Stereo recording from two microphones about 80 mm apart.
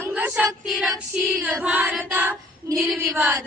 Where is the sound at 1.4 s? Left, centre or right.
Right.